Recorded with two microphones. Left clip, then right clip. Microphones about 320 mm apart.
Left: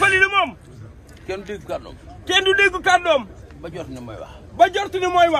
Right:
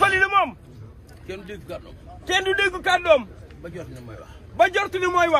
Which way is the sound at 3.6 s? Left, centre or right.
Centre.